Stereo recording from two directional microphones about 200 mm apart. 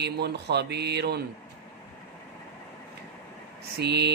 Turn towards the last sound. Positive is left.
turn(degrees=-55)  # may be behind; listen again after turning